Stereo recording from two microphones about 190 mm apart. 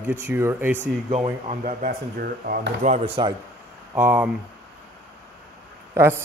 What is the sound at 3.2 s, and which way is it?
Speech, 25° right (ahead or behind).